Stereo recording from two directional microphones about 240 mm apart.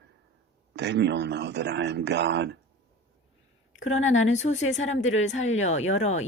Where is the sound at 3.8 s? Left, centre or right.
Left.